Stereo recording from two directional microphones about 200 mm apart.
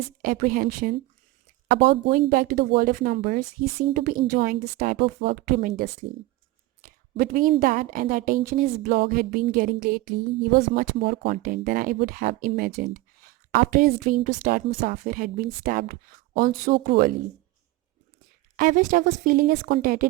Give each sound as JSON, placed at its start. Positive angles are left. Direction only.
{"t": 0.2, "sound": "speech", "side_deg": -45}
{"t": 6.8, "sound": "a sound", "side_deg": -45}
{"t": 7.6, "sound": "speech", "side_deg": -45}
{"t": 18.5, "sound": "speech", "side_deg": -45}